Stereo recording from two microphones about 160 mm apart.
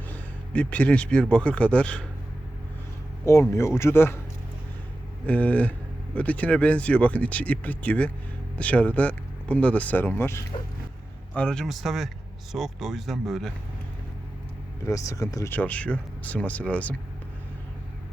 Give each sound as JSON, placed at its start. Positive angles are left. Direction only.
{"t": 0.1, "sound": "speech", "side_deg": 10}
{"t": 3.2, "sound": "speech", "side_deg": 15}
{"t": 5.2, "sound": "speech", "side_deg": 10}
{"t": 14.8, "sound": "speech", "side_deg": 20}